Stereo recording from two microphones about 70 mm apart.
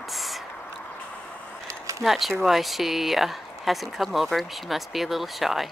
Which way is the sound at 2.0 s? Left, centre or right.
Centre.